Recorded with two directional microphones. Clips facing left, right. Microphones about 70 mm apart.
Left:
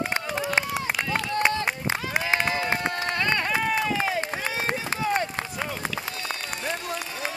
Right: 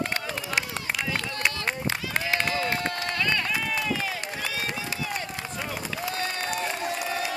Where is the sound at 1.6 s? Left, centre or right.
Centre.